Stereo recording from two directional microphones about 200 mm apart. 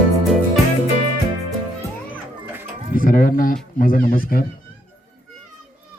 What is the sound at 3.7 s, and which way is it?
Music, 45° left (ahead or behind).